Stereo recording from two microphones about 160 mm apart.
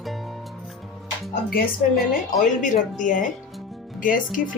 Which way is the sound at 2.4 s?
55° left (ahead or behind).